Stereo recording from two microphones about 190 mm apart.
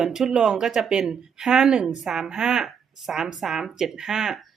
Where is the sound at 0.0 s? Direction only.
Centre (ahead or behind).